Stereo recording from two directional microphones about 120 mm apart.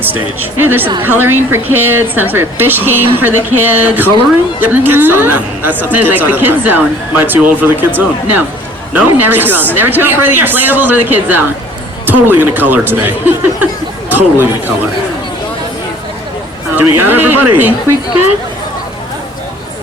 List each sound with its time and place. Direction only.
0.0 s speech: 15° right (ahead or behind)
16.7 s speech: 15° right (ahead or behind)